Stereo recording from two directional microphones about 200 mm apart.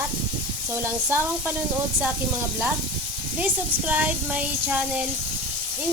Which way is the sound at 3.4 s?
5° right (ahead or behind).